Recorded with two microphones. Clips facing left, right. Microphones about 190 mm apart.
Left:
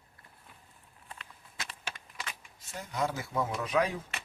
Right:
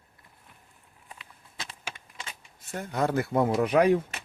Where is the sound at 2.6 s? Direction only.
55° right (ahead or behind).